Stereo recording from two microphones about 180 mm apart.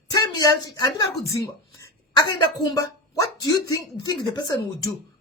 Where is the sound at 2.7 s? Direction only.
20° left (ahead or behind).